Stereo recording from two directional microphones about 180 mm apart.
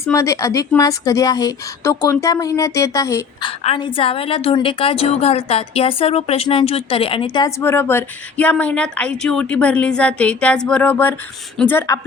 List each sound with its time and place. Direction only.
0.0 s speech: 15° left (ahead or behind)
3.4 s a woman's voice: 30° left (ahead or behind)
7.6 s speech: 10° left (ahead or behind)